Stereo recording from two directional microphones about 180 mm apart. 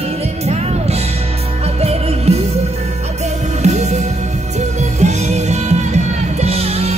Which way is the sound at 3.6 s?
40° right (ahead or behind).